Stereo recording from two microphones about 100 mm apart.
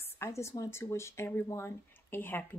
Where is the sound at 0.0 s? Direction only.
30° left (ahead or behind).